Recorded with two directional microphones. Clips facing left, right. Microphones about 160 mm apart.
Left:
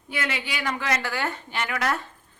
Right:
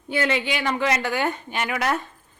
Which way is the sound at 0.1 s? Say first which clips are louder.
Right 7 dB; 25° right (ahead or behind).